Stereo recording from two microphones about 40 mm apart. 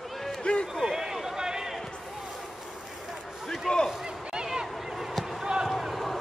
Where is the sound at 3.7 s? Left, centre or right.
Centre.